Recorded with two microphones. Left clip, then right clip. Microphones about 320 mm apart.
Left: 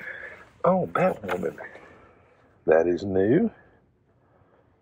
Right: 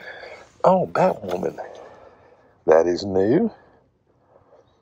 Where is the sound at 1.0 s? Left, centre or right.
Centre.